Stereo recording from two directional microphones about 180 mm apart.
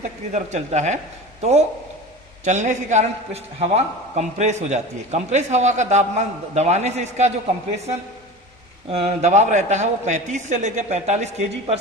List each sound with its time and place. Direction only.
0.3 s a man's voice: 40° right (ahead or behind)
8.9 s a man's voice: 35° right (ahead or behind)